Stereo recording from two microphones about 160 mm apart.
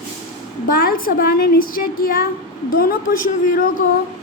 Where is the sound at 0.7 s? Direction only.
65° left (ahead or behind).